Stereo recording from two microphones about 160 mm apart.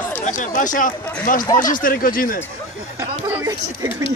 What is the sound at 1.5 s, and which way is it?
Speech, 55° left (ahead or behind).